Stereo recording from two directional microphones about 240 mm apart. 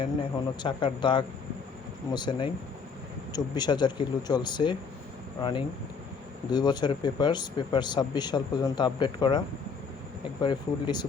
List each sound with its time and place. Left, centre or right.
0.0 s a man's voice: left
10.4 s a man's voice: centre